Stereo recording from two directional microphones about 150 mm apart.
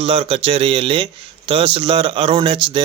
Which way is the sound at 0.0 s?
40° right (ahead or behind).